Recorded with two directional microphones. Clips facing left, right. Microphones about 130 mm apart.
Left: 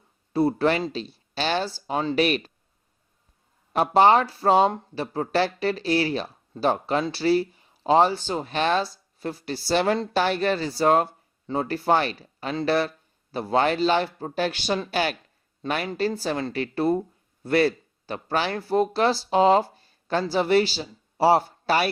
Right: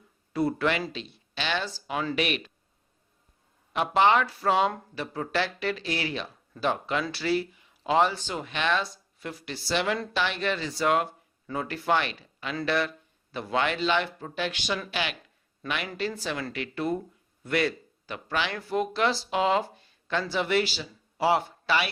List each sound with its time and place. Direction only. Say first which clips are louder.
0.3 s speech: left 5 dB; 30° left (ahead or behind)
3.7 s speech: left 5 dB; 40° left (ahead or behind)